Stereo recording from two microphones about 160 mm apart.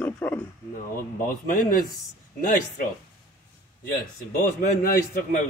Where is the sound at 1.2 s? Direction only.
60° left (ahead or behind).